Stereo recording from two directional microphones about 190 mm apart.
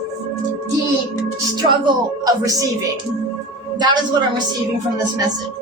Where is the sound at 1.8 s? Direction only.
20° right (ahead or behind).